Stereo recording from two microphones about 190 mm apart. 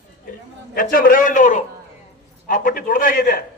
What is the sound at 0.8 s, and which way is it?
A man's voice, 50° left (ahead or behind).